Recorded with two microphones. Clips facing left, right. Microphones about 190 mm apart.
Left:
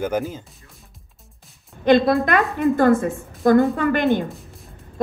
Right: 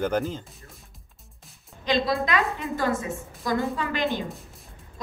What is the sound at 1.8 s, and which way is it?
A woman's voice, 55° left (ahead or behind).